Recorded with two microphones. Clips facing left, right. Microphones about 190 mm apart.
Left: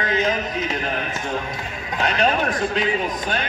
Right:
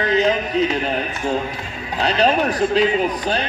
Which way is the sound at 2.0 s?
35° right (ahead or behind).